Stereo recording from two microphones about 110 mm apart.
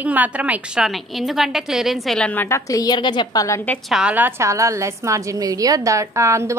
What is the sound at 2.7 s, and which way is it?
Speech, 35° left (ahead or behind).